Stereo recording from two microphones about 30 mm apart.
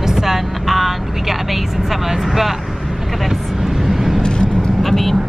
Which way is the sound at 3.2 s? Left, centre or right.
Centre.